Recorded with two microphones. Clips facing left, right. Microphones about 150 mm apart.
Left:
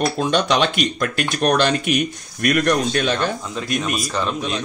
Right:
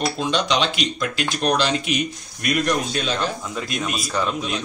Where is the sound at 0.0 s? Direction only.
50° left (ahead or behind).